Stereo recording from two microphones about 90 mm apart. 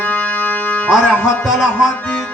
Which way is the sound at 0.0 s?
20° left (ahead or behind).